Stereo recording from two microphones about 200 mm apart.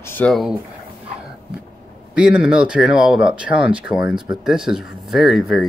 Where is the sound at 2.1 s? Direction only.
5° right (ahead or behind).